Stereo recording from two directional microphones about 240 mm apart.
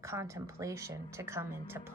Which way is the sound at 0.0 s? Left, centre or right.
Centre.